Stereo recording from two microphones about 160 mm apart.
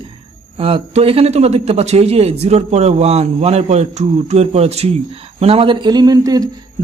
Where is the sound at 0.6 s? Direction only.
35° right (ahead or behind).